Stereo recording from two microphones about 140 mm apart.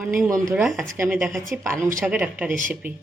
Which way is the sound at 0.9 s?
10° right (ahead or behind).